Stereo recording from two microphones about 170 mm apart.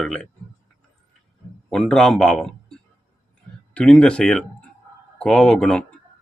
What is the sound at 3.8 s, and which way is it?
A man's voice, 5° left (ahead or behind).